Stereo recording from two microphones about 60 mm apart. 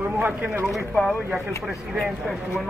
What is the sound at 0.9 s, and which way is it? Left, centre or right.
Speech, centre.